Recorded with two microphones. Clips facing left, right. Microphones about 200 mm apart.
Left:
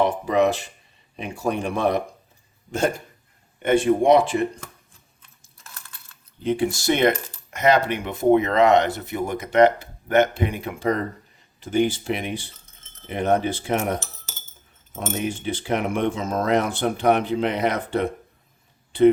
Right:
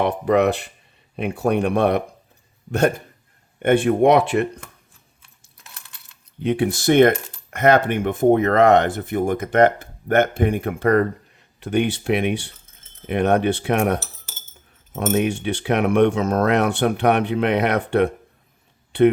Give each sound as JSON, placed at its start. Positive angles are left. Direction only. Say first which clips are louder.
{"t": 0.0, "sound": "speech", "louder": "right 2 dB", "side_deg": -60}
{"t": 3.6, "sound": "speech", "louder": "right 3 dB", "side_deg": -60}
{"t": 6.4, "sound": "speech", "louder": "right 2 dB", "side_deg": -65}